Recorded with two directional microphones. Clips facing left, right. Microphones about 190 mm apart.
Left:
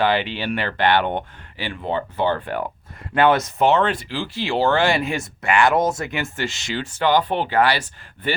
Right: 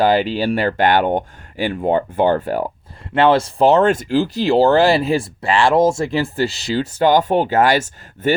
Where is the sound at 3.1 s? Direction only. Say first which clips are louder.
Right 3 dB; 25° right (ahead or behind).